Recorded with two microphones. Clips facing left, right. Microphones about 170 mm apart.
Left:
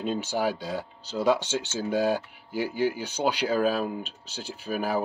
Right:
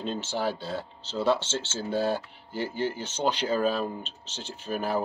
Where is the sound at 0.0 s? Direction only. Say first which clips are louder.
Left 3 dB; 10° left (ahead or behind).